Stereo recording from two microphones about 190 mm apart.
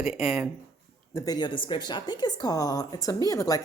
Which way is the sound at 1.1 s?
20° left (ahead or behind).